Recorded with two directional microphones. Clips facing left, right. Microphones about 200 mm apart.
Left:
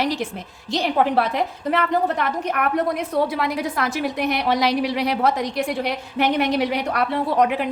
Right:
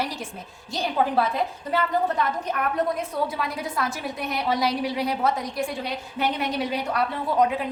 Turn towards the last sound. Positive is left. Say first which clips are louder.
# left 3 dB
turn(degrees=75)  # may be behind; listen again after turning